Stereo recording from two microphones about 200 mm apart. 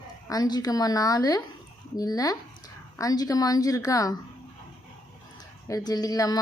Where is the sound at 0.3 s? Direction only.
20° left (ahead or behind).